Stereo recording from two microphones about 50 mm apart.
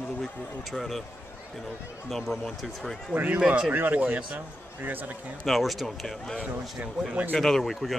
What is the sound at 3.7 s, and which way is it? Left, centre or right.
Speech, right.